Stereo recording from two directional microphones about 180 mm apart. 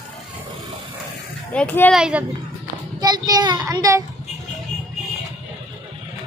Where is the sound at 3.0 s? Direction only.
20° right (ahead or behind).